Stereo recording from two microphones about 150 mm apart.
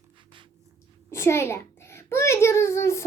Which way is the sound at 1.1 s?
20° left (ahead or behind).